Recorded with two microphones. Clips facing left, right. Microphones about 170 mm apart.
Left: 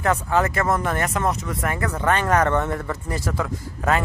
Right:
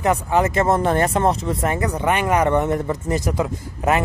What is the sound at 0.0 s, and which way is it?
Speech, 15° right (ahead or behind).